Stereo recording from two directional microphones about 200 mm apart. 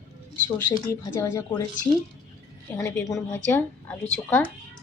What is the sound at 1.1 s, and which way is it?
Speech, 15° left (ahead or behind).